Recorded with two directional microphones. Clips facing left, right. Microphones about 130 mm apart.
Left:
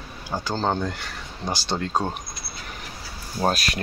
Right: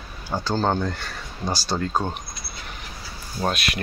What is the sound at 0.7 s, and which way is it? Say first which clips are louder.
Speech: right 1 dB; 15° left (ahead or behind).